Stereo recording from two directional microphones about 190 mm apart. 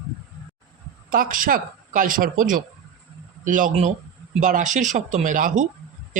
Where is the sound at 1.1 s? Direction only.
45° right (ahead or behind).